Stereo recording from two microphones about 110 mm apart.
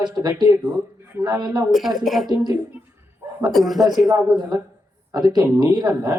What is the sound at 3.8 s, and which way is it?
A man's voice, 35° right (ahead or behind).